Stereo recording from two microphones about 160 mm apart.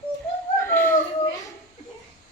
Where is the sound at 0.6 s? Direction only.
15° left (ahead or behind).